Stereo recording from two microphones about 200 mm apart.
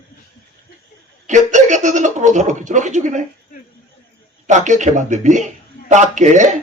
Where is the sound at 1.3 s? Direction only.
35° right (ahead or behind).